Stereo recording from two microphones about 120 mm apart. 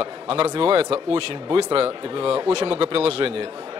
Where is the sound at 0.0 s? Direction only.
50° right (ahead or behind).